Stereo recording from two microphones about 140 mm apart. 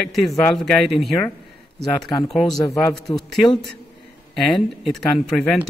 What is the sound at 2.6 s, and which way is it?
Speech, 25° left (ahead or behind).